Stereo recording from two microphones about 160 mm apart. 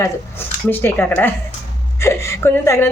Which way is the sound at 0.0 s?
15° left (ahead or behind).